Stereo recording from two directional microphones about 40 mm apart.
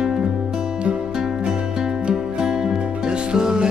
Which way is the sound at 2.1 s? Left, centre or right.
Centre.